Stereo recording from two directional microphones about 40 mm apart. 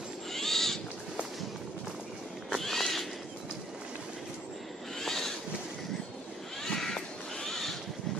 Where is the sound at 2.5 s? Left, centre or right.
Centre.